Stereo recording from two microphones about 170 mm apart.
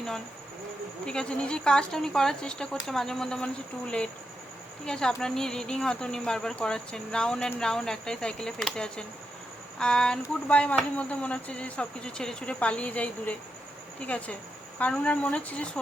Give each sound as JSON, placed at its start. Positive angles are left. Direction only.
{"t": 1.0, "sound": "speech", "side_deg": 5}
{"t": 14.8, "sound": "speech", "side_deg": 5}